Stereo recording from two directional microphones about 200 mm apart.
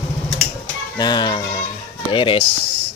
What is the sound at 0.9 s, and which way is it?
Speech, 20° left (ahead or behind).